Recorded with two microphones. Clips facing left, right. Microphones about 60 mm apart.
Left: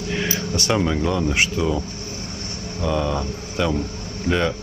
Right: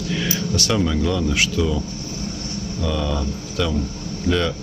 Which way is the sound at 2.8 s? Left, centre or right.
Left.